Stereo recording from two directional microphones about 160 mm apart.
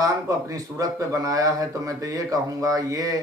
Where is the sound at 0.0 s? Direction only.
20° right (ahead or behind).